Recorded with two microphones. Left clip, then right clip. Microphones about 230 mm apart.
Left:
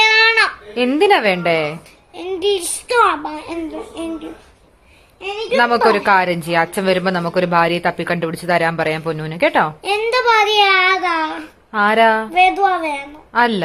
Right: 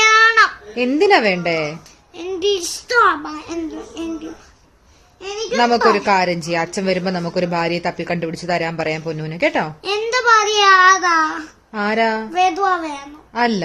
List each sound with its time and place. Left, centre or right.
0.0 s baby cry: centre
0.8 s speech: centre
2.1 s speech: centre
5.5 s speech: centre
9.8 s a child's voice: centre
11.7 s speech: centre
13.3 s speech: centre